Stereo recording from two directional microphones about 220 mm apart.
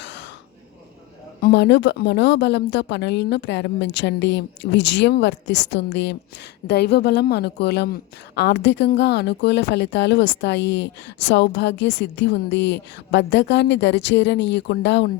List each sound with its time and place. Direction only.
0.0 s throat clearing: 55° left (ahead or behind)
1.4 s a woman's voice: 45° left (ahead or behind)